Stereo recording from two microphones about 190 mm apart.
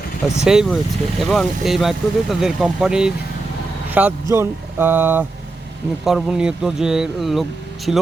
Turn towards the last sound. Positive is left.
turn(degrees=0)  # may be behind; listen again after turning